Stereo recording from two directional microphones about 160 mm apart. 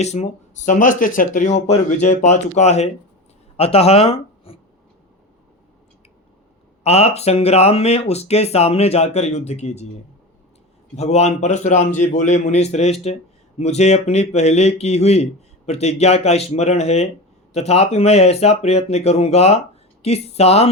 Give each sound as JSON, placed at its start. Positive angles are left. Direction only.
{"t": 0.0, "sound": "speech", "side_deg": 45}
{"t": 6.8, "sound": "speech", "side_deg": 40}
{"t": 10.9, "sound": "speech", "side_deg": 40}